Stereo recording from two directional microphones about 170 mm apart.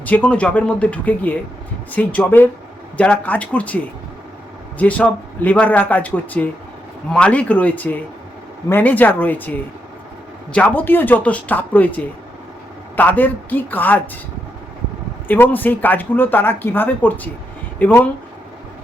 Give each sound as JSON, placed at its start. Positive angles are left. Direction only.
{"t": 0.0, "sound": "speech", "side_deg": 10}
{"t": 4.8, "sound": "speech", "side_deg": 10}
{"t": 15.3, "sound": "speech", "side_deg": 10}